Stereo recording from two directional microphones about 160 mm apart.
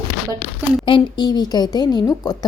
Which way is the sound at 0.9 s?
30° left (ahead or behind).